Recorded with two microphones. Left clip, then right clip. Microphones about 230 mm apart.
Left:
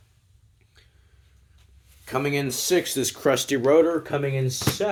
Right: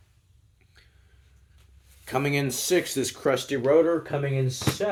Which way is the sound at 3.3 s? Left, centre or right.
Left.